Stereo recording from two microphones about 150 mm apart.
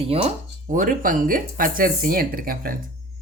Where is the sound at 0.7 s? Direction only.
65° right (ahead or behind).